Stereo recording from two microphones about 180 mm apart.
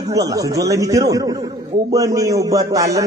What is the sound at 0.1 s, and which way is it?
A man's voice, 20° right (ahead or behind).